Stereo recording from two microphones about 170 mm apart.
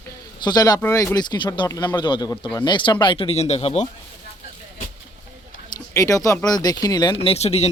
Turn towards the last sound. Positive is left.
turn(degrees=40)  # may be behind; listen again after turning